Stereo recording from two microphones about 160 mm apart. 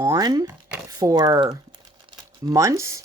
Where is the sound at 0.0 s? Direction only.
20° right (ahead or behind).